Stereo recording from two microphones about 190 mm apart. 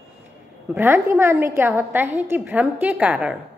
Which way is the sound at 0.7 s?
10° right (ahead or behind).